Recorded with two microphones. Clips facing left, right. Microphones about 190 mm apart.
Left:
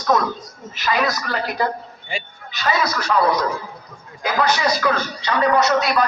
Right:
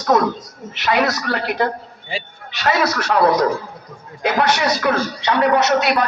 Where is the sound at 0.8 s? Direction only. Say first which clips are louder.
Right 3 dB; 75° right (ahead or behind).